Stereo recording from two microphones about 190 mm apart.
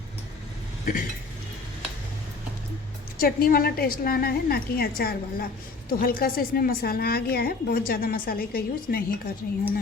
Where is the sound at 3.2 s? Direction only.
50° left (ahead or behind).